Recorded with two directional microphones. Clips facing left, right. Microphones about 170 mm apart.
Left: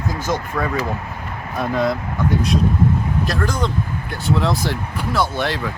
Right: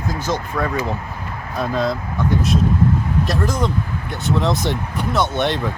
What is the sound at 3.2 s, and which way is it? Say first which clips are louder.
Speech: right 1 dB; 5° right (ahead or behind).